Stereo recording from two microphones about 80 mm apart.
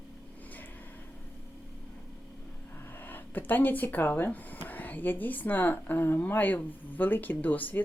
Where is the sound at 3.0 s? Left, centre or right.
Left.